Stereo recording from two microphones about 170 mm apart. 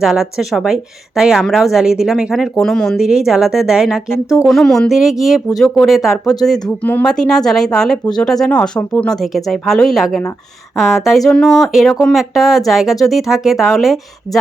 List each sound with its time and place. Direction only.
0.0 s speech: 5° right (ahead or behind)